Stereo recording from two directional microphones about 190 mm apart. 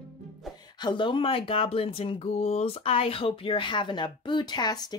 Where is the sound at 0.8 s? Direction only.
25° left (ahead or behind).